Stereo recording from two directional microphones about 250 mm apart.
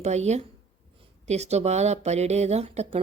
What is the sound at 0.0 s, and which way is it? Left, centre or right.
A woman's voice, right.